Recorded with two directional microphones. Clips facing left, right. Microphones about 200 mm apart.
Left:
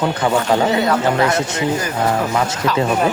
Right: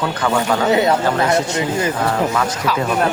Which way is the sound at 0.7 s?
25° right (ahead or behind).